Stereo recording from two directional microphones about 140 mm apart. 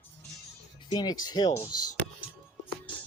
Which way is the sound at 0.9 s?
30° left (ahead or behind).